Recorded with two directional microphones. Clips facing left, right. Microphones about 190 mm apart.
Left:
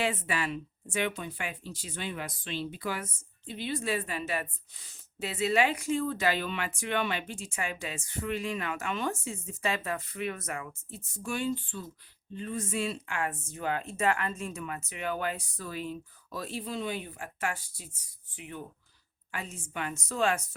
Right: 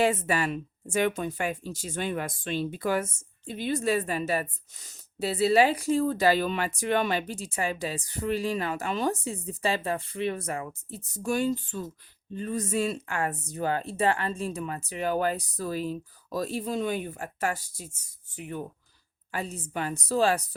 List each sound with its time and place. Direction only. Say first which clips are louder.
0.0 s speech: right 6 dB; 40° right (ahead or behind)